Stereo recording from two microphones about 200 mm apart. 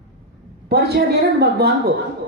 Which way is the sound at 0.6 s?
55° right (ahead or behind).